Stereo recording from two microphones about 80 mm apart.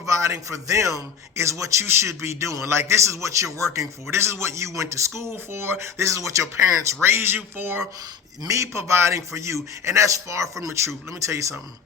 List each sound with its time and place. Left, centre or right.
0.0 s a man's voice: right
7.0 s speech: right
8.4 s a man's voice: right